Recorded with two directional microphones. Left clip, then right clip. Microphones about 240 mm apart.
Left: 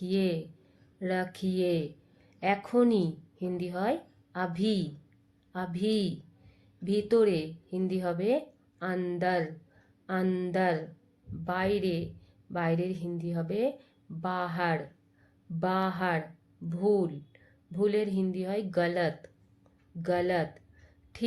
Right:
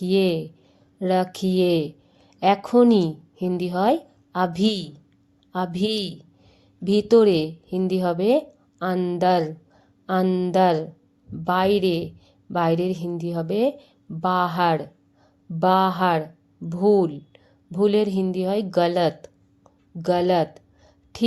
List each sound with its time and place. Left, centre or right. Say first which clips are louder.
0.0 s a woman's voice: right 10 dB; right